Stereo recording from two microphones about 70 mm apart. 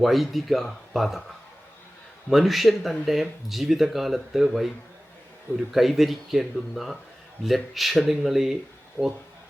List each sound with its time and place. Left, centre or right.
0.0 s speech: centre
2.3 s speech: centre
5.7 s speech: centre
9.0 s speech: right